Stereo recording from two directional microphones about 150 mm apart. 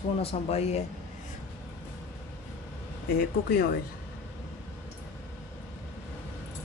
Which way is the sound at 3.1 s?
90° left.